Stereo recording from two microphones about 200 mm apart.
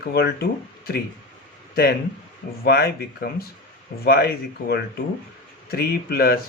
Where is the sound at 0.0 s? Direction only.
50° left (ahead or behind).